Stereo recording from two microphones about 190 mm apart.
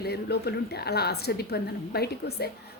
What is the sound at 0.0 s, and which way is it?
A woman's voice, 60° left (ahead or behind).